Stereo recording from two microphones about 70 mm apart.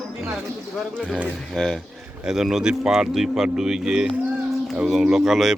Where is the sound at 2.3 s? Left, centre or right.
Centre.